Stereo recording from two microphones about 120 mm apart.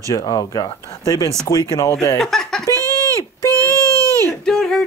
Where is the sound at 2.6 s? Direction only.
25° right (ahead or behind).